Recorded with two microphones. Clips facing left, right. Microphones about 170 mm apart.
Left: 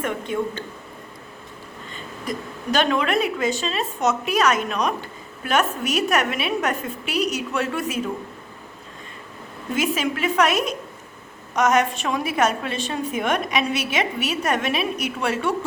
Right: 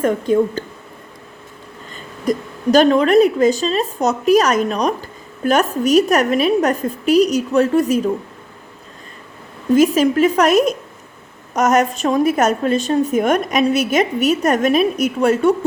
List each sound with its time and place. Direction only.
0.0 s a woman's voice: 40° right (ahead or behind)
2.3 s a woman's voice: 40° right (ahead or behind)
9.7 s a woman's voice: 40° right (ahead or behind)